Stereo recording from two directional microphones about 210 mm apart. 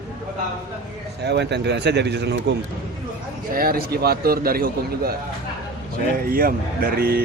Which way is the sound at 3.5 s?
45° right (ahead or behind).